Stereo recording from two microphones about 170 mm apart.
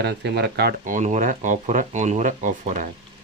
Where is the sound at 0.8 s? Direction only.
50° right (ahead or behind).